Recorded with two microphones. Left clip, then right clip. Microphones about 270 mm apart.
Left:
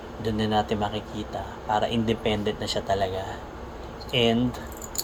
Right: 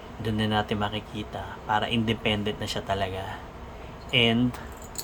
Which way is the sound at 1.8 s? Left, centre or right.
Centre.